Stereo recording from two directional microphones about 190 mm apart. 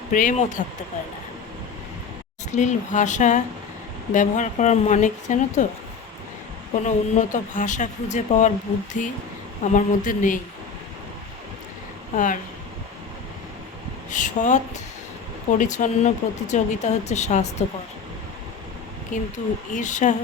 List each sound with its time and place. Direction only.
0.1 s speech: 45° left (ahead or behind)
2.5 s speech: 40° left (ahead or behind)
6.8 s speech: 40° left (ahead or behind)
12.1 s speech: 45° left (ahead or behind)
14.1 s speech: 40° left (ahead or behind)
19.1 s speech: 40° left (ahead or behind)